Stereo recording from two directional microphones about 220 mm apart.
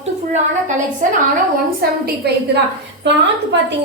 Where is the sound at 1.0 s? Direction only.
35° right (ahead or behind).